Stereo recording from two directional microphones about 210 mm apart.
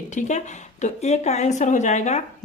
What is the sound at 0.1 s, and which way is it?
A woman's voice, 35° left (ahead or behind).